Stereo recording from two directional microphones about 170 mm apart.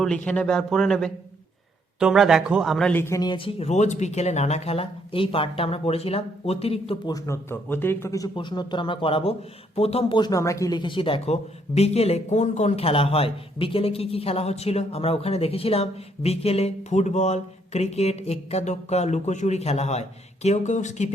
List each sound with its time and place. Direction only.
0.3 s speech: 5° left (ahead or behind); by 7.1 s 35° left (ahead or behind)
7.1 s a man's voice: 15° left (ahead or behind); by 21.1 s 45° left (ahead or behind)